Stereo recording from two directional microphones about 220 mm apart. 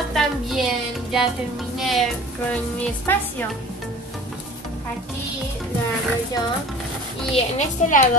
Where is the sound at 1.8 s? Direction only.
Centre (ahead or behind).